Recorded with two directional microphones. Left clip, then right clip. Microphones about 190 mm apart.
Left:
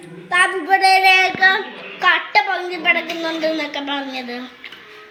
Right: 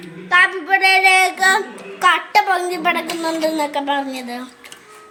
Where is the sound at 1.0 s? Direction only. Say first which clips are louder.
Even; 75° right (ahead or behind).